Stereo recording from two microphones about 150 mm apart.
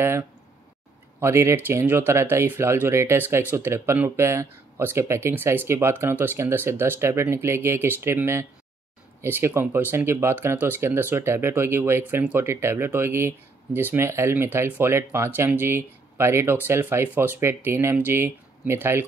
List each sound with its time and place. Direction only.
1.2 s speech: 20° right (ahead or behind)